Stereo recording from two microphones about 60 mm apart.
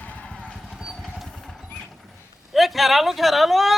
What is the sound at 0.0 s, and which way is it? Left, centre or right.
Vehicle, left.